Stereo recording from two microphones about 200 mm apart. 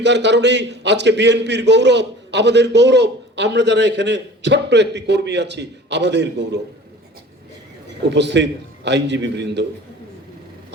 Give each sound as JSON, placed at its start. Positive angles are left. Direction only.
{"t": 0.0, "sound": "a man's voice", "side_deg": -60}
{"t": 8.1, "sound": "a man's voice", "side_deg": -60}